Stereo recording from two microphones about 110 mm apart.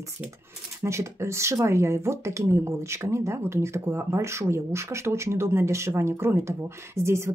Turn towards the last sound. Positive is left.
turn(degrees=-25)  # may be behind; listen again after turning